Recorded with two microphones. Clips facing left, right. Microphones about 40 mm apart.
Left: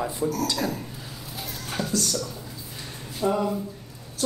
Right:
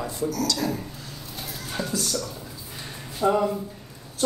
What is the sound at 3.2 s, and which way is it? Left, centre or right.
Speech, right.